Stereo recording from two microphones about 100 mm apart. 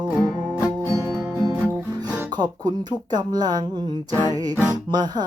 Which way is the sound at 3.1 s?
45° right (ahead or behind).